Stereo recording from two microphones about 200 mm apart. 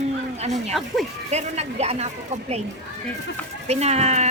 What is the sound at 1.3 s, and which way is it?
Speech, 35° right (ahead or behind).